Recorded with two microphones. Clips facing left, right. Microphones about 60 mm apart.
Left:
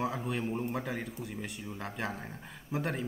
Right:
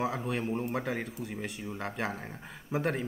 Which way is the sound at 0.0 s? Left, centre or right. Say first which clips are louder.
Right 2 dB; centre.